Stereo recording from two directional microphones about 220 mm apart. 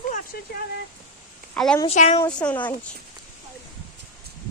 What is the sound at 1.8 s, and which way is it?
Speech, 30° left (ahead or behind).